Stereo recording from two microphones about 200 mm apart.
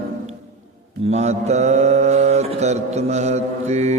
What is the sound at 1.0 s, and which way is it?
Mantra, 35° right (ahead or behind).